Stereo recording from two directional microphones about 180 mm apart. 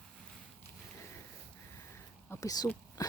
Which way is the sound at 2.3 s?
20° left (ahead or behind).